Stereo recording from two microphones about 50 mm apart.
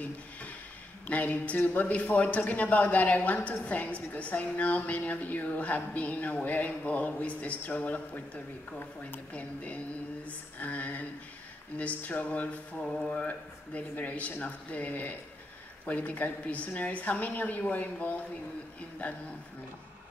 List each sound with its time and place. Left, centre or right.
1.0 s a woman's voice: left
9.3 s a woman's voice: left
12.8 s a woman's voice: centre; by 19.2 s left